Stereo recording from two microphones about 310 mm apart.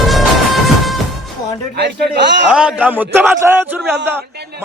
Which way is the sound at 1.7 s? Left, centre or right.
Right.